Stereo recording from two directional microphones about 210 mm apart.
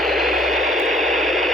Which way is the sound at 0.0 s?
Centre (ahead or behind).